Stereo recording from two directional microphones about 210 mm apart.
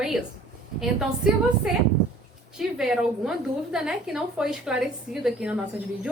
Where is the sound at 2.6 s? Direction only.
Centre (ahead or behind).